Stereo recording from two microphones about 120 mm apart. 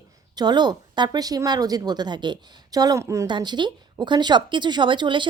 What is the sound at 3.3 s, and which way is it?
A woman's voice, 40° right (ahead or behind).